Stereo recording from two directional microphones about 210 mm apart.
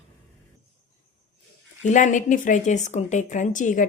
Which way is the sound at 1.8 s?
35° left (ahead or behind).